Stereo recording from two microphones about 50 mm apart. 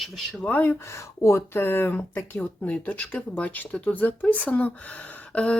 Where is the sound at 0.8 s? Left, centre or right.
Left.